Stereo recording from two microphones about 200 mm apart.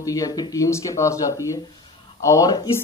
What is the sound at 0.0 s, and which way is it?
Speech, 15° left (ahead or behind).